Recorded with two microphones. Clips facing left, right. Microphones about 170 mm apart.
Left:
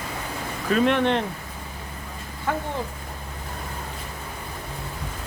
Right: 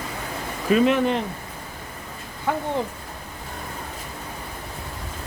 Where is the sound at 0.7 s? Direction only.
5° right (ahead or behind).